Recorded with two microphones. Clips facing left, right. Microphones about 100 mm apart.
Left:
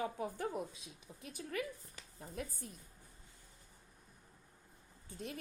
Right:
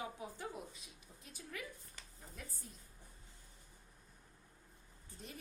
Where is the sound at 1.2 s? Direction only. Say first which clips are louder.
Left 8 dB; 65° left (ahead or behind).